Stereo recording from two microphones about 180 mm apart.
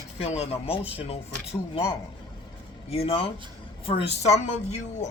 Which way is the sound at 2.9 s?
35° left (ahead or behind).